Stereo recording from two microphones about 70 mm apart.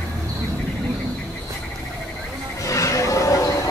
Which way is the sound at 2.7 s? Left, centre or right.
Left.